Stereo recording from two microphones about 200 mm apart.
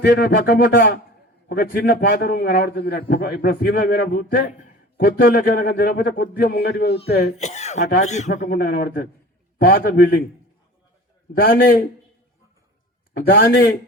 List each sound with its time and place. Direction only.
0.0 s a man's voice: 55° left (ahead or behind)
7.3 s speech: 35° left (ahead or behind)
8.4 s a man's voice: 50° left (ahead or behind)
11.3 s a man's voice: 50° left (ahead or behind)
13.2 s a man's voice: 55° left (ahead or behind)